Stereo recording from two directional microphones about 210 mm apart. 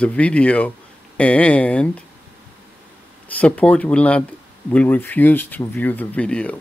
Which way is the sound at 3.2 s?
5° left (ahead or behind).